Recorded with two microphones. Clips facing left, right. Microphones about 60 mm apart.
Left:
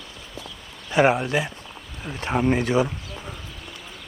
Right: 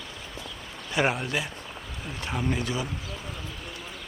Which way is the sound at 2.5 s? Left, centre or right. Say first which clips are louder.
Left 9 dB; left.